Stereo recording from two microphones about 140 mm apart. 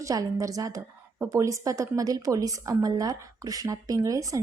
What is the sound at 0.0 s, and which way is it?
A woman's voice, 25° right (ahead or behind).